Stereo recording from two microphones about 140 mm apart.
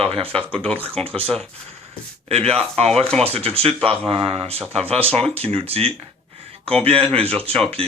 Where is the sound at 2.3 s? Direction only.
45° right (ahead or behind).